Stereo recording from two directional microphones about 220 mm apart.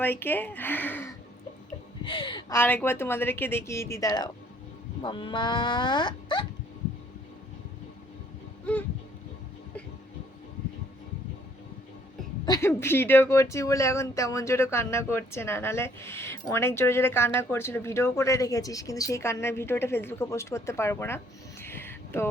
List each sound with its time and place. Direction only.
0.0 s speech: 10° left (ahead or behind)
2.0 s speech: 20° left (ahead or behind)
2.6 s speech: 10° left (ahead or behind)
12.5 s speech: 10° left (ahead or behind)
21.6 s a sound: 10° left (ahead or behind)